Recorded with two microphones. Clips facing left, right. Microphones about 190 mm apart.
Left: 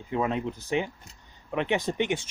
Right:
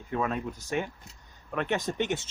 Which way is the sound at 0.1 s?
20° left (ahead or behind).